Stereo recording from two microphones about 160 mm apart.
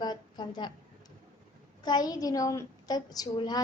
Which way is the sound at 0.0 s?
25° left (ahead or behind).